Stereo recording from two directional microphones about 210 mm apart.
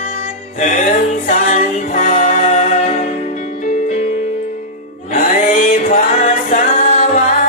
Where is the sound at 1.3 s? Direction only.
35° left (ahead or behind).